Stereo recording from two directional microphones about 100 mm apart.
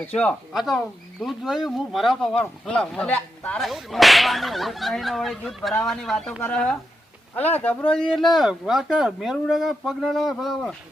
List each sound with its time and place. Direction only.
0.0 s speech: 15° left (ahead or behind)
0.5 s speech: centre (ahead or behind)
3.6 s speech: centre (ahead or behind)
8.4 s speech: 5° right (ahead or behind)